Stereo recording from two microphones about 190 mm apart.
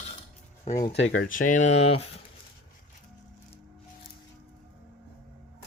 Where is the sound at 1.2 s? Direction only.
45° left (ahead or behind).